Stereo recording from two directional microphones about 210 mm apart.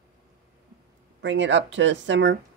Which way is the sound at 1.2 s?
60° right (ahead or behind).